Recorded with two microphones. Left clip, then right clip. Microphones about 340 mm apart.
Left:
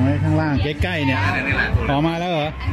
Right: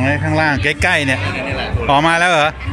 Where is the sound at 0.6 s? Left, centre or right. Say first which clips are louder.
Right 8 dB; centre.